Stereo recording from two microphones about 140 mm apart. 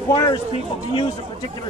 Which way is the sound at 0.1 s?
25° left (ahead or behind).